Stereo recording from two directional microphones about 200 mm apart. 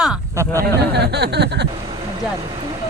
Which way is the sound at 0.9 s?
55° right (ahead or behind).